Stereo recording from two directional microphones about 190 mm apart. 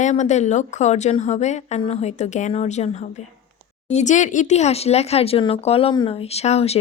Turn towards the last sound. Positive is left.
turn(degrees=35)  # may be behind; listen again after turning